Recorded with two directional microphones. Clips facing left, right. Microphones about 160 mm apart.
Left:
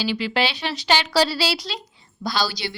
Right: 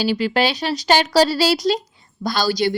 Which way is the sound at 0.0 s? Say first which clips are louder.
Right 5 dB; 45° right (ahead or behind).